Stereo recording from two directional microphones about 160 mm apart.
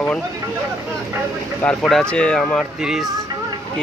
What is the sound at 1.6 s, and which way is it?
Speech, 5° left (ahead or behind).